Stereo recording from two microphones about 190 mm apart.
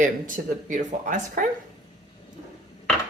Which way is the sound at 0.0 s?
40° right (ahead or behind).